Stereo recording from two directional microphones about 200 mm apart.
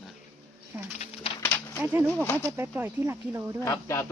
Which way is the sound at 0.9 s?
35° left (ahead or behind).